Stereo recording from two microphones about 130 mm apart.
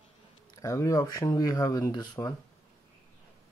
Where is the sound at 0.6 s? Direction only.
25° left (ahead or behind).